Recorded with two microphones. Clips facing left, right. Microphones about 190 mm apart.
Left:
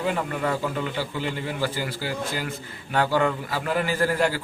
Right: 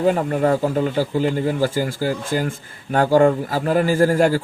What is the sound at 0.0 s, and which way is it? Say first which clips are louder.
Speech: right 8 dB; 40° right (ahead or behind).